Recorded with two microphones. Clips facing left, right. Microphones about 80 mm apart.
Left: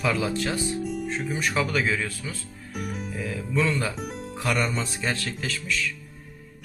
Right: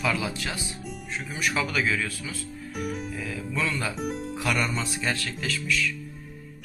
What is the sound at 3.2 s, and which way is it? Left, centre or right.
Speech, left.